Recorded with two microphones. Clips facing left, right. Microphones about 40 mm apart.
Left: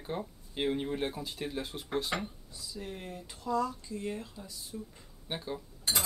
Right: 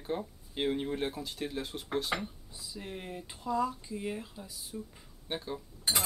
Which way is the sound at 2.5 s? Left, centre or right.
Centre.